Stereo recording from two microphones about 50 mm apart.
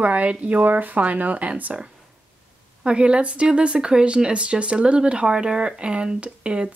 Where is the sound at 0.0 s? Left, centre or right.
Right.